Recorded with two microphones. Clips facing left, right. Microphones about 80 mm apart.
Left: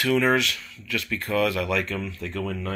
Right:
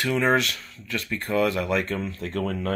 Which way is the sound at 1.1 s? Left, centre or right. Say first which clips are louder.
Right 1 dB; right.